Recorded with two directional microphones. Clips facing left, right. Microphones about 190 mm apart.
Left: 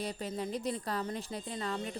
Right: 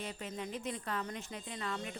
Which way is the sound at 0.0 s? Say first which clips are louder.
Left 5 dB; 35° left (ahead or behind).